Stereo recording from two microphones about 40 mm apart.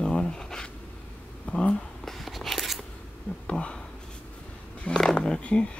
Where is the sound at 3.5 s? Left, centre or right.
Left.